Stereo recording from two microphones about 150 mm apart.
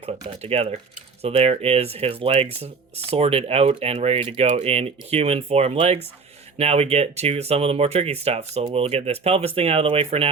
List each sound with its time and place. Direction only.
0.2 s speech: 35° right (ahead or behind)